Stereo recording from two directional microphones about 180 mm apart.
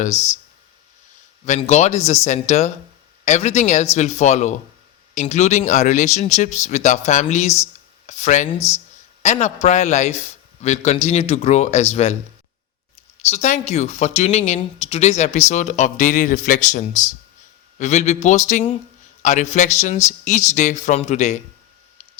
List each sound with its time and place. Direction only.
0.0 s speech: 40° left (ahead or behind)
1.5 s speech: 40° left (ahead or behind)
8.5 s speech: 15° left (ahead or behind)
9.2 s speech: 40° left (ahead or behind)
13.3 s speech: 40° left (ahead or behind)